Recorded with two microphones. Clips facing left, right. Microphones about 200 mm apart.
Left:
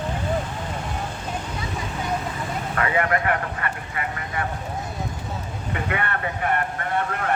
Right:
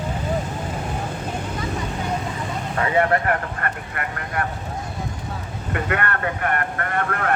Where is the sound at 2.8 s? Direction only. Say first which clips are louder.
Right 1 dB; 25° right (ahead or behind).